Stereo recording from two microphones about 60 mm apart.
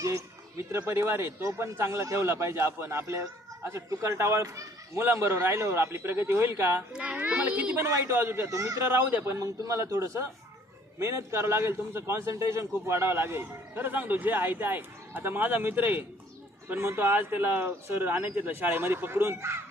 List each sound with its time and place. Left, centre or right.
0.7 s a man's voice: right
5.0 s a man's voice: right
6.9 s a child's voice: centre
7.3 s a sound: right
7.8 s a man's voice: right
8.1 s a man's voice: right
8.4 s speech: right
8.8 s a man's voice: right
9.4 s a man's voice: right
16.6 s a man's voice: right